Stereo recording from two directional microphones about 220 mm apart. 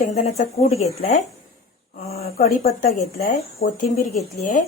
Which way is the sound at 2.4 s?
40° left (ahead or behind).